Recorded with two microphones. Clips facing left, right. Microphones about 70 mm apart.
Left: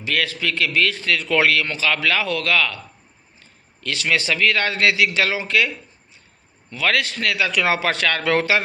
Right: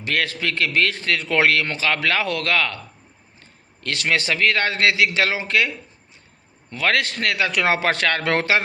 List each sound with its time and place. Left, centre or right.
0.0 s a man's voice: right